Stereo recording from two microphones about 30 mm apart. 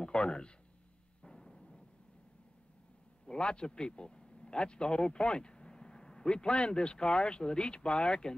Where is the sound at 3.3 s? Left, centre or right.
Left.